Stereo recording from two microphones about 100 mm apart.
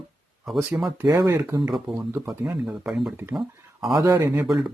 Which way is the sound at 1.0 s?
35° right (ahead or behind).